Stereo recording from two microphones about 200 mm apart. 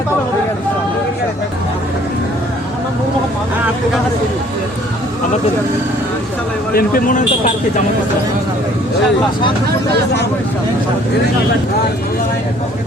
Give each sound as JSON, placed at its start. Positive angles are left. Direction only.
{"t": 6.7, "sound": "speech", "side_deg": 45}